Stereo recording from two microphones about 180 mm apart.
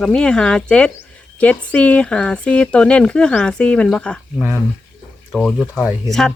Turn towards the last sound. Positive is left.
turn(degrees=0)  # may be behind; listen again after turning